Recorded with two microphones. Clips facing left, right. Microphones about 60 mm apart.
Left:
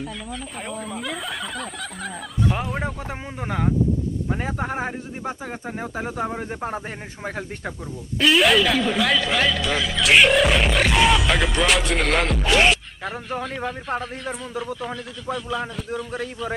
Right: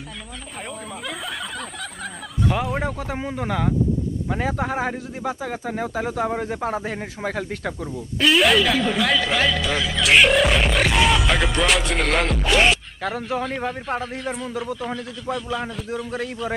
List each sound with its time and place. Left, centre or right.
3.2 s speech: right
8.2 s a man's voice: centre